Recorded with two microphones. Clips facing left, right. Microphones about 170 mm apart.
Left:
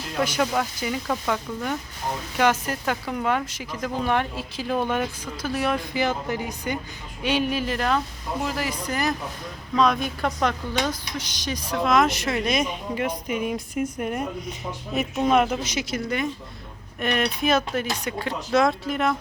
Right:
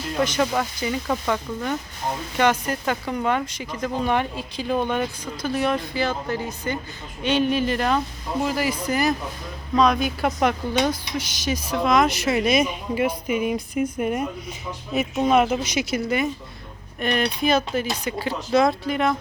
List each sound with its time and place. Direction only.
0.2 s speech: 5° left (ahead or behind)
5.9 s speech: 15° left (ahead or behind); by 19.1 s centre (ahead or behind)